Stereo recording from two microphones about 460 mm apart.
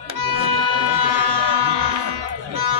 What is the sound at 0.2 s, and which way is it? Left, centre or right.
Music, right.